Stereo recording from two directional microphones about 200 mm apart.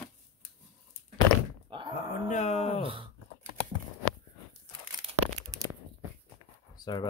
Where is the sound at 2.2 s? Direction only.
35° left (ahead or behind).